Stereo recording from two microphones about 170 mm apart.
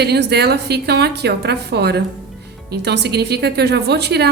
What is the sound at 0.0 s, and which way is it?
A woman's voice, 75° right (ahead or behind).